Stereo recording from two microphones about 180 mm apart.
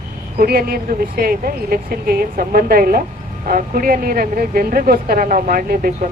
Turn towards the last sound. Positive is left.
turn(degrees=-50)  # may be behind; listen again after turning